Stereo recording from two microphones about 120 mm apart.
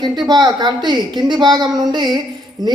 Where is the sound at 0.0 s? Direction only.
35° right (ahead or behind).